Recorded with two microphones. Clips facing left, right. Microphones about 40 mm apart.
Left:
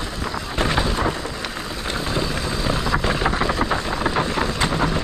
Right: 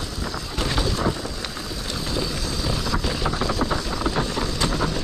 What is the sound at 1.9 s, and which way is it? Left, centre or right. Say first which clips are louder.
Vehicle: left 3 dB; left.